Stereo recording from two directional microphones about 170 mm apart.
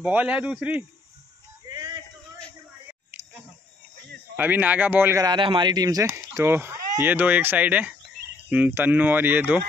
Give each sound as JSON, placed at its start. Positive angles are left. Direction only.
{"t": 0.0, "sound": "speech", "side_deg": -10}
{"t": 1.7, "sound": "a sound", "side_deg": -25}
{"t": 4.4, "sound": "speech", "side_deg": -10}
{"t": 5.2, "sound": "speech", "side_deg": -30}